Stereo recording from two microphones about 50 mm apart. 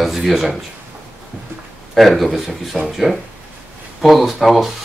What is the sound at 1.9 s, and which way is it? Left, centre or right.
Speech, centre.